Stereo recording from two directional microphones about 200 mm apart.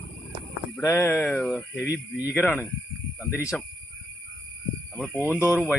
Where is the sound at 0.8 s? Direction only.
10° left (ahead or behind).